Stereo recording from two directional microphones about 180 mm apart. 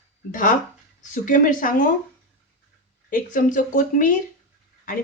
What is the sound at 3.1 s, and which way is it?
Speech, 50° left (ahead or behind).